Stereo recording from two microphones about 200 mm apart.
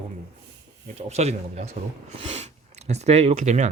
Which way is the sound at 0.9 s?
35° right (ahead or behind).